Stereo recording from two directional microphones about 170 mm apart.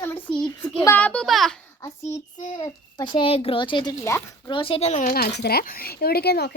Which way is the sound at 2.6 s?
25° left (ahead or behind).